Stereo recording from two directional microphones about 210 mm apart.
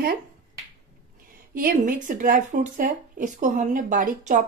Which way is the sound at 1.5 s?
40° right (ahead or behind).